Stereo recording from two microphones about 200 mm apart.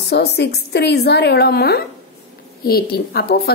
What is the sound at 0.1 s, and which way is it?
A woman's voice, 55° left (ahead or behind).